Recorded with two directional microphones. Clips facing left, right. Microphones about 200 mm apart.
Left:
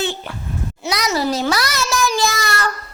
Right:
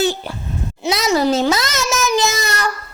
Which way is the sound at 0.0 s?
35° right (ahead or behind).